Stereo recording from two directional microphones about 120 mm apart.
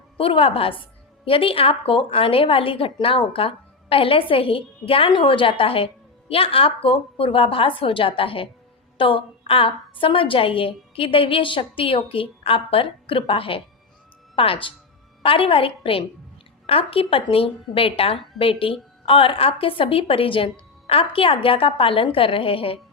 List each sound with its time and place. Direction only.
0.2 s a woman's voice: 50° left (ahead or behind)